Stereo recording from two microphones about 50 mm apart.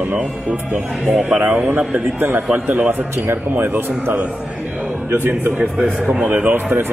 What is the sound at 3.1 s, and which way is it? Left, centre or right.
Speech, right.